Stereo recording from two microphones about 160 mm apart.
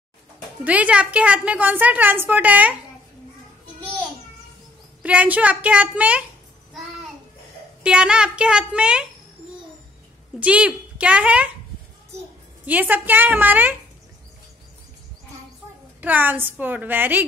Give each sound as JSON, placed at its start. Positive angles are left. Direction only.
{"t": 0.7, "sound": "a woman's voice", "side_deg": -10}
{"t": 5.0, "sound": "a woman's voice", "side_deg": -10}
{"t": 7.8, "sound": "a child's voice", "side_deg": -5}
{"t": 10.4, "sound": "a woman's voice", "side_deg": -10}
{"t": 12.6, "sound": "a woman's voice", "side_deg": -10}
{"t": 16.0, "sound": "a woman's voice", "side_deg": -10}